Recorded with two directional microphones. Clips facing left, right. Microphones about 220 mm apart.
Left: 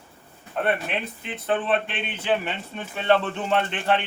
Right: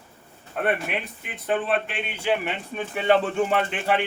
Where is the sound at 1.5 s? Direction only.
10° right (ahead or behind).